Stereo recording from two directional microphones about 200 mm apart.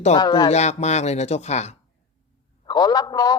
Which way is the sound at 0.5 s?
35° left (ahead or behind).